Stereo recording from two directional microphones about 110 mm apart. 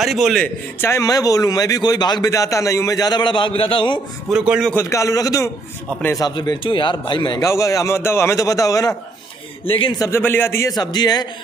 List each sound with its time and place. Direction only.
0.0 s a man's voice: centre (ahead or behind)
0.4 s a man's voice: 20° left (ahead or behind)
1.0 s a man's voice: 35° left (ahead or behind)
4.3 s a man's voice: 5° right (ahead or behind)
4.7 s a man's voice: 25° left (ahead or behind); by 7.4 s 45° left (ahead or behind)
7.4 s a man's voice: 30° left (ahead or behind)
9.7 s a man's voice: 55° left (ahead or behind)
9.9 s a man's voice: 25° left (ahead or behind)
10.7 s a man's voice: 40° left (ahead or behind)